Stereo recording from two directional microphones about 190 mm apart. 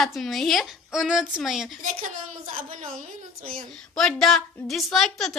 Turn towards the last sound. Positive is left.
turn(degrees=0)  # may be behind; listen again after turning